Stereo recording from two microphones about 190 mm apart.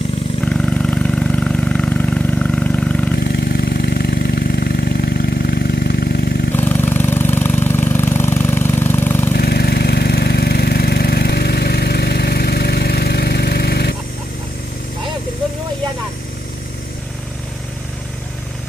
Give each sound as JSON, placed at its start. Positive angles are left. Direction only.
{"t": 0.4, "sound": "vehicle", "side_deg": 5}
{"t": 3.2, "sound": "vehicle", "side_deg": 60}
{"t": 6.5, "sound": "engine", "side_deg": 10}
{"t": 9.4, "sound": "engine", "side_deg": 55}